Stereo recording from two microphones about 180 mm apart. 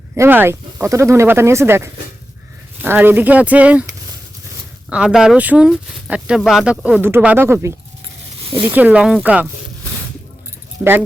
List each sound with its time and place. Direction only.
0.2 s speech: 10° right (ahead or behind)
4.9 s speech: 5° right (ahead or behind)
8.4 s a sound: 30° right (ahead or behind)
8.6 s speech: 10° right (ahead or behind)
10.8 s speech: 10° right (ahead or behind)